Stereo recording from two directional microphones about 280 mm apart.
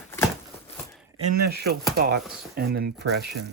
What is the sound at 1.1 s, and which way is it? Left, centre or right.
Speech, right.